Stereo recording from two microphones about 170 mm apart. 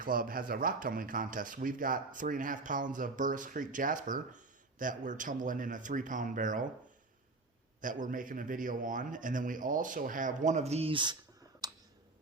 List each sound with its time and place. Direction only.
0.0 s speech: 55° right (ahead or behind)
7.8 s speech: 50° right (ahead or behind); by 11.2 s 30° right (ahead or behind)
11.6 s clicking: 25° right (ahead or behind)